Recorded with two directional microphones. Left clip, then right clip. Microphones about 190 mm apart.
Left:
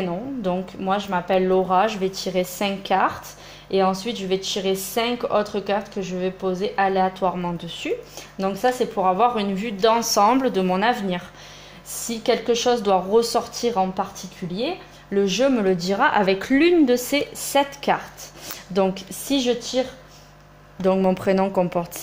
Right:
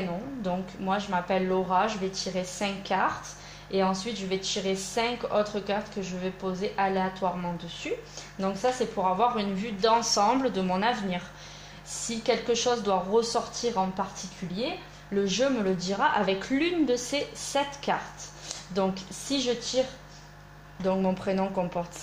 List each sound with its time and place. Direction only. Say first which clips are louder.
0.4 s speech: left 7 dB; 50° left (ahead or behind)
15.1 s speech: left 7 dB; 50° left (ahead or behind)
20.8 s speech: left 8 dB; 50° left (ahead or behind)